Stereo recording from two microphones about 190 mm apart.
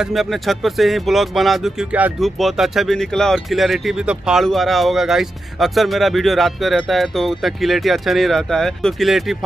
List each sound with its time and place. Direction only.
0.0 s speech: centre (ahead or behind)